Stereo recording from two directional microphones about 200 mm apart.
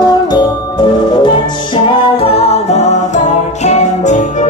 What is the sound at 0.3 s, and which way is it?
Music, 20° left (ahead or behind).